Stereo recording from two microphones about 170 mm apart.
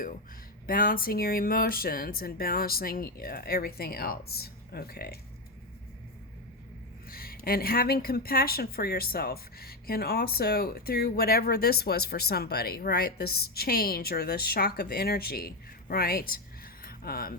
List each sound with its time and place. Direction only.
0.7 s speech: 55° left (ahead or behind)
7.1 s speech: 60° left (ahead or behind)
16.8 s a sound: 60° left (ahead or behind)